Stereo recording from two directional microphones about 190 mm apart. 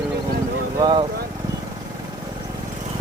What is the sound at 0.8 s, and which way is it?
Speech, 25° right (ahead or behind).